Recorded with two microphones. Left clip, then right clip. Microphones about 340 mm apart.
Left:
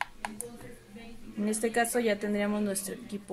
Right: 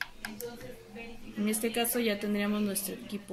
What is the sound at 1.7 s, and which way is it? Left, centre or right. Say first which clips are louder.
A woman's voice: left 5 dB; left.